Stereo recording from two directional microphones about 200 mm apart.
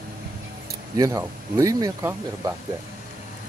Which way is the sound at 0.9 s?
15° right (ahead or behind).